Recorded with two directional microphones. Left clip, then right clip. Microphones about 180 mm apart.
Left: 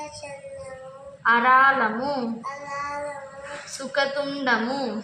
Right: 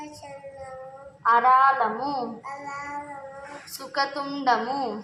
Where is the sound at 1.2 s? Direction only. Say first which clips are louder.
Left 1 dB; 20° right (ahead or behind).